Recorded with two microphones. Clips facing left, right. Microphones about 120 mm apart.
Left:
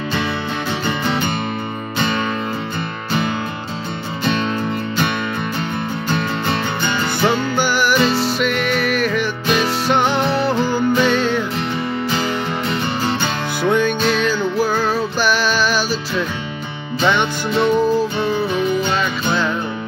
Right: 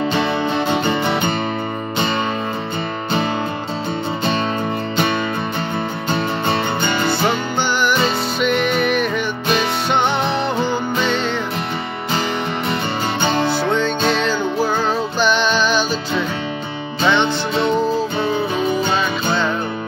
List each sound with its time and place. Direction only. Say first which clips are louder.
0.7 s music: right 3 dB; 20° right (ahead or behind)
6.1 s music: right 2 dB; 25° right (ahead or behind)
7.1 s music: left 1 dB; 10° left (ahead or behind)
13.7 s music: left 1 dB; 10° left (ahead or behind)